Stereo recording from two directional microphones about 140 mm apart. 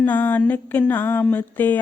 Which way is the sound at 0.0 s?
10° left (ahead or behind).